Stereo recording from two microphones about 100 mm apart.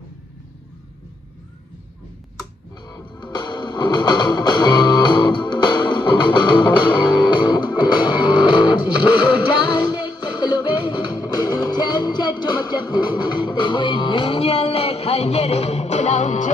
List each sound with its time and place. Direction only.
2.9 s music: 45° left (ahead or behind); by 15.9 s 90° left